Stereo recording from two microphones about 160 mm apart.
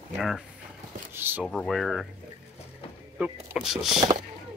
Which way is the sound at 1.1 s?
15° right (ahead or behind).